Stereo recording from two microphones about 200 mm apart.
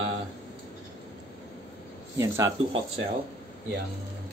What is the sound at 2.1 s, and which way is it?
Speech, 15° right (ahead or behind).